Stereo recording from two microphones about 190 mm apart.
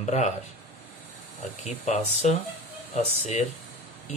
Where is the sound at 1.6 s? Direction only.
35° left (ahead or behind).